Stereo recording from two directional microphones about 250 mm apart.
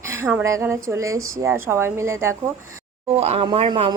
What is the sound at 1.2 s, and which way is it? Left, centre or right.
Speech, right.